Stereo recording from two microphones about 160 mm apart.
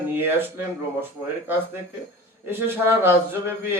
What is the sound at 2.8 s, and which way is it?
Speech, 15° right (ahead or behind).